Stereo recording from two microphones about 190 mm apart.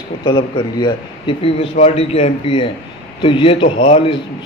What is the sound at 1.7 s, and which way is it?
A man's voice, 35° left (ahead or behind).